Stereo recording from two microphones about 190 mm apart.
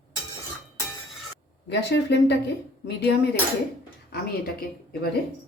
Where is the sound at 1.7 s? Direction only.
65° left (ahead or behind).